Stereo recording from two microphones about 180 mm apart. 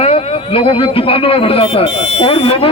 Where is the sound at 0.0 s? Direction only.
30° left (ahead or behind).